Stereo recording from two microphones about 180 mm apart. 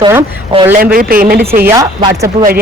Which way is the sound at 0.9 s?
50° right (ahead or behind).